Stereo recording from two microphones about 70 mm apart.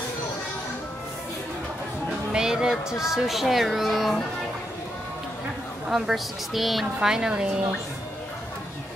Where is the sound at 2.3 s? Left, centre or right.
Centre.